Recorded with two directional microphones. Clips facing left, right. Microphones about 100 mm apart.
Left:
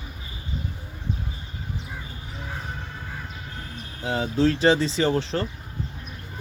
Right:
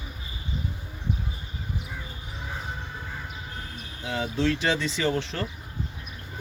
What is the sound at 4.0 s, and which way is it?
Speech, 35° left (ahead or behind).